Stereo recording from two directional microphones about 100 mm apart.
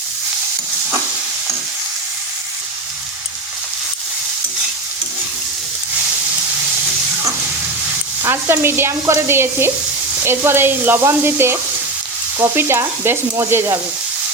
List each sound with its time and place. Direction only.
8.2 s sizzle: 25° right (ahead or behind)